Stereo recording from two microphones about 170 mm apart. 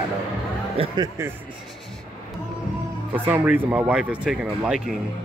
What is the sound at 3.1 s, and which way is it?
Speech, 10° right (ahead or behind).